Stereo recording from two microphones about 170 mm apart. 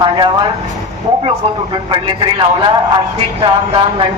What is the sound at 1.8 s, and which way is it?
A man's voice, 30° right (ahead or behind).